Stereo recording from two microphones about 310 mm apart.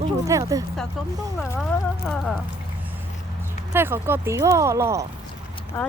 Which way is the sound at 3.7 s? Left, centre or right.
Centre.